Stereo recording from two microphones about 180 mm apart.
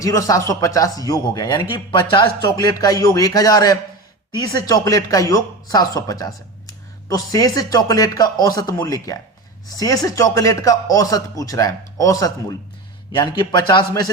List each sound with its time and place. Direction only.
0.0 s speech: 20° left (ahead or behind)